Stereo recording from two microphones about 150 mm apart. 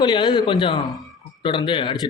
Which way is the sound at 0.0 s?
30° left (ahead or behind).